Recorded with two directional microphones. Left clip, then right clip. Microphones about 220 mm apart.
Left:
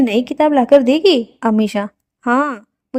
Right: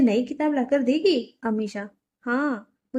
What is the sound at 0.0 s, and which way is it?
A woman's voice, 40° left (ahead or behind).